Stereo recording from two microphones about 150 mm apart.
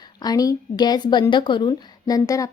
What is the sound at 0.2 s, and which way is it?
Speech, 25° left (ahead or behind).